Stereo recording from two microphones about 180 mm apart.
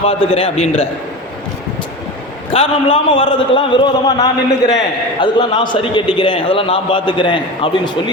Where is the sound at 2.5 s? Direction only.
30° left (ahead or behind).